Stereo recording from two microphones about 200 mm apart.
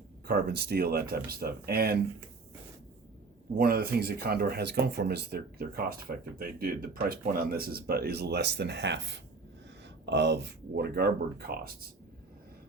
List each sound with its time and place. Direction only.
0.3 s speech: 50° right (ahead or behind)
3.6 s speech: 50° right (ahead or behind)